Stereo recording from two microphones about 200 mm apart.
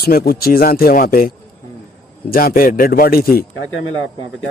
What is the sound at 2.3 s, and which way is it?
A man's voice, 45° left (ahead or behind).